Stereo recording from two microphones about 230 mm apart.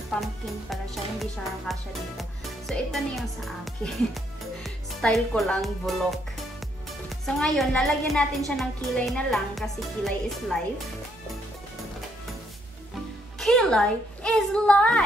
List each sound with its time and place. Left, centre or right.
0.1 s speech: centre
13.4 s speech: centre